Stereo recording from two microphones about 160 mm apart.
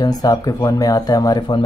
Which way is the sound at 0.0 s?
25° left (ahead or behind).